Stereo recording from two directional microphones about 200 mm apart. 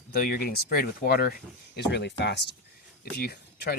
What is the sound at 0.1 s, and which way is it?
Speech, 50° left (ahead or behind).